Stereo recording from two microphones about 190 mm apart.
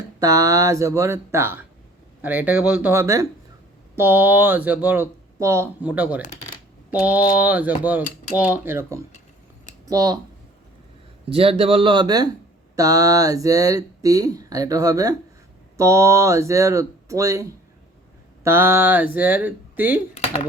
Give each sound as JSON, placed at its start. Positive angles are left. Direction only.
{"t": 0.2, "sound": "speech", "side_deg": -20}
{"t": 7.3, "sound": "speech", "side_deg": -10}
{"t": 11.3, "sound": "speech", "side_deg": -30}